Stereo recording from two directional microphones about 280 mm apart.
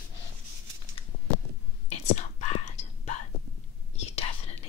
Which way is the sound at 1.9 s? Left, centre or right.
Left.